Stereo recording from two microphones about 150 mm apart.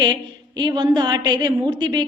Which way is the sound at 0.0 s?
30° right (ahead or behind).